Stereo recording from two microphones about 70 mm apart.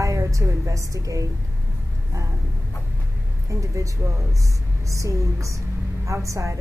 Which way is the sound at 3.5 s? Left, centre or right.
Right.